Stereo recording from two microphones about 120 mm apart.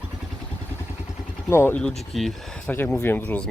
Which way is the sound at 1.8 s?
5° left (ahead or behind).